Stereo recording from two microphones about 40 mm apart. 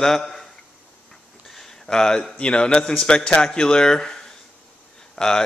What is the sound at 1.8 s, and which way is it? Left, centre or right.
Speech, centre.